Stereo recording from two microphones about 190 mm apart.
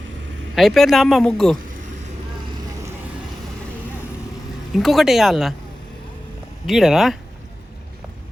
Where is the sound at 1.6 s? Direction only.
45° right (ahead or behind).